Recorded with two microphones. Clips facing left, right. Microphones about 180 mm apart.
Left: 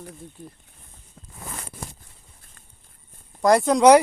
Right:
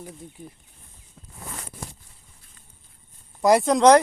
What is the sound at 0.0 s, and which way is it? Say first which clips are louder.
Speech: even; 10° right (ahead or behind).